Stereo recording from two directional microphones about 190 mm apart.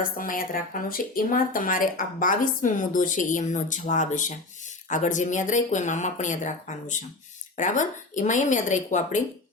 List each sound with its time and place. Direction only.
0.0 s a woman's voice: 45° left (ahead or behind)